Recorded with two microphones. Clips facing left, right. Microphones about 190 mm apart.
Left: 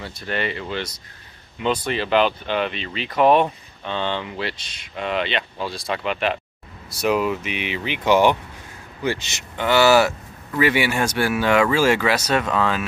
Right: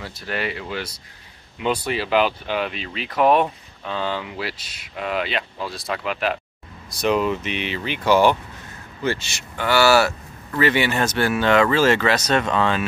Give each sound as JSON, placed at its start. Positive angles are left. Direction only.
{"t": 0.0, "sound": "speech", "side_deg": -5}